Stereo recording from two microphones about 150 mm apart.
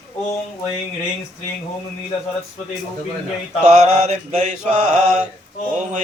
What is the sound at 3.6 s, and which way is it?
Mantra, 50° right (ahead or behind).